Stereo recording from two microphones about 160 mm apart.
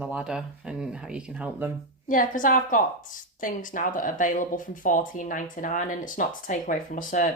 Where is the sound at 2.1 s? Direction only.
55° left (ahead or behind).